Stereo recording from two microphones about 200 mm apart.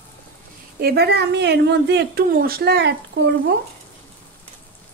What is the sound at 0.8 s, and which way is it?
A woman's voice, 55° right (ahead or behind).